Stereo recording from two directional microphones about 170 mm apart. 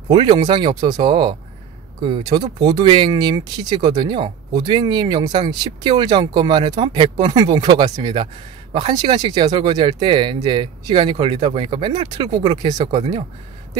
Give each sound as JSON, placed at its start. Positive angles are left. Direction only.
{"t": 0.1, "sound": "speech", "side_deg": -30}